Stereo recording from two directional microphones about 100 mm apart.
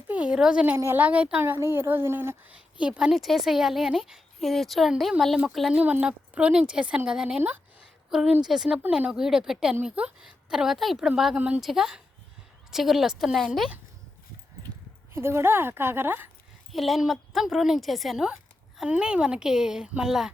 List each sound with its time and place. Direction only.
0.1 s a sound: 10° right (ahead or behind)
0.8 s a woman's voice: 20° right (ahead or behind)
2.8 s a woman's voice: 10° right (ahead or behind)
5.7 s a woman's voice: 15° right (ahead or behind)
15.1 s a woman's voice: 25° right (ahead or behind)
16.7 s a woman's voice: centre (ahead or behind)